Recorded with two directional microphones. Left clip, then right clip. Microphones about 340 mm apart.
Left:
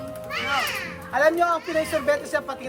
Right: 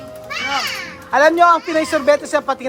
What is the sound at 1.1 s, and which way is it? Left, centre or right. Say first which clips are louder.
Speech: right 9 dB; centre.